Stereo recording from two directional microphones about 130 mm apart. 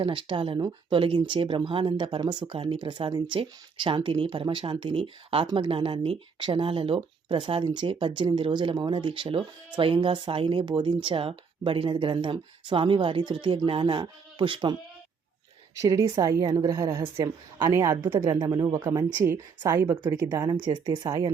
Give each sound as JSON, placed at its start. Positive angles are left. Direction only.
{"t": 0.0, "sound": "speech", "side_deg": -40}
{"t": 15.8, "sound": "a woman's voice", "side_deg": -25}
{"t": 20.5, "sound": "speech", "side_deg": -35}